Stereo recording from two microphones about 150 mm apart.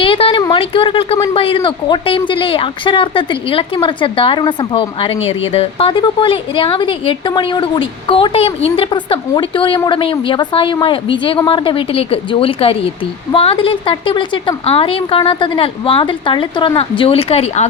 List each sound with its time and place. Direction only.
0.0 s a woman's voice: 35° left (ahead or behind)